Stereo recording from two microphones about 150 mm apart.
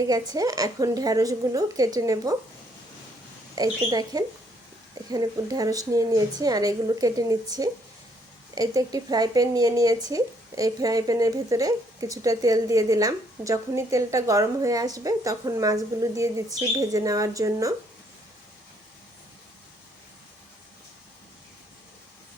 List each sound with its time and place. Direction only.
0.1 s speech: 25° right (ahead or behind)
3.5 s speech: 25° right (ahead or behind)